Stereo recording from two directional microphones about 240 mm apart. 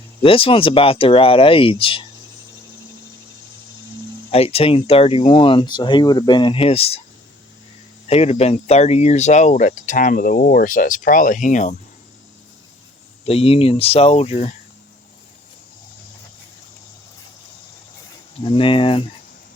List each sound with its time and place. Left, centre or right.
0.2 s speech: left
4.3 s speech: left
8.1 s speech: left
13.2 s speech: left
18.3 s speech: left